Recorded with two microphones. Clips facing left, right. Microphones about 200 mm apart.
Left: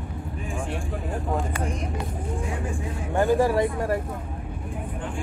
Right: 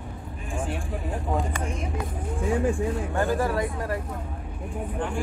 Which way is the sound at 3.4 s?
25° left (ahead or behind).